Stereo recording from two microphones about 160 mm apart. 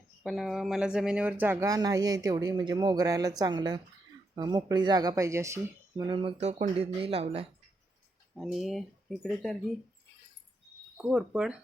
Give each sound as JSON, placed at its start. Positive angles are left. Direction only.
{"t": 0.2, "sound": "speech", "side_deg": 0}
{"t": 6.0, "sound": "speech", "side_deg": -30}
{"t": 8.4, "sound": "speech", "side_deg": 0}
{"t": 10.9, "sound": "speech", "side_deg": -5}